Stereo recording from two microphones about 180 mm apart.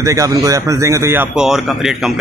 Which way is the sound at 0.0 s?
15° right (ahead or behind).